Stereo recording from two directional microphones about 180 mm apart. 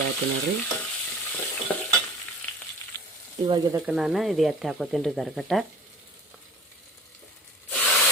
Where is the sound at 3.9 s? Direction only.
5° right (ahead or behind).